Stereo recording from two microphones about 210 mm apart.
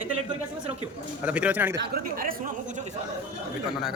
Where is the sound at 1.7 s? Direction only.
45° right (ahead or behind).